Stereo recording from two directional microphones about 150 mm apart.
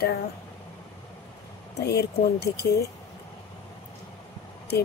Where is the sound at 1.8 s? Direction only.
90° left.